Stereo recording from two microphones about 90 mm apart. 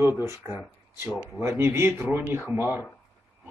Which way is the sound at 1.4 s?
30° right (ahead or behind).